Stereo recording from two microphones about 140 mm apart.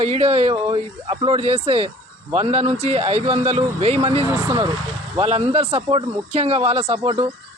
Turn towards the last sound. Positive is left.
turn(degrees=-45)  # may be behind; listen again after turning